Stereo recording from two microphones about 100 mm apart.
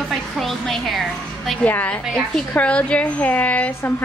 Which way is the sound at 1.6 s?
15° left (ahead or behind).